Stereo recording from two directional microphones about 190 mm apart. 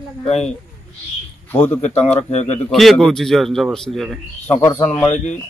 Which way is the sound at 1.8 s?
35° left (ahead or behind).